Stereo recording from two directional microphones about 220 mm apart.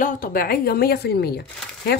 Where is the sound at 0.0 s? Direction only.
40° left (ahead or behind).